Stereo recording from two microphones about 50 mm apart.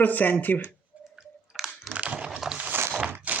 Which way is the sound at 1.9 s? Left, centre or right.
Right.